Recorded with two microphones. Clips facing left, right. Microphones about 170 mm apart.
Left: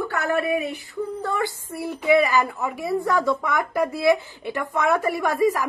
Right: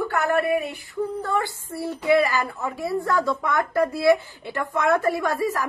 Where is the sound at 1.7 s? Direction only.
15° left (ahead or behind).